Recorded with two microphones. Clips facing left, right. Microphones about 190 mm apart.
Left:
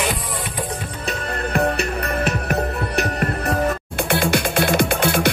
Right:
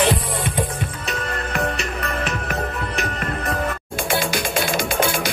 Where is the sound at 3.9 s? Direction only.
60° left (ahead or behind).